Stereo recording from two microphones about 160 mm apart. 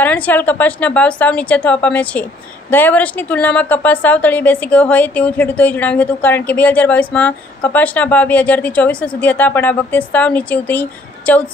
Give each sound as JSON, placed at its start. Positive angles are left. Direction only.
{"t": 0.0, "sound": "a woman's voice", "side_deg": 10}